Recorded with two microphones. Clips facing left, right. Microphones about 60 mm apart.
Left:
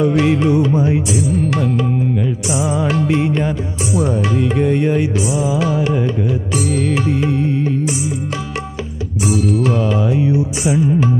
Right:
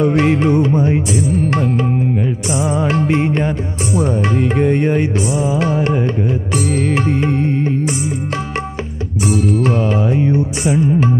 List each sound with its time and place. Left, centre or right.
0.0 s music: right
0.7 s music: centre
1.1 s music: right
9.2 s music: right
9.8 s music: right
10.7 s music: centre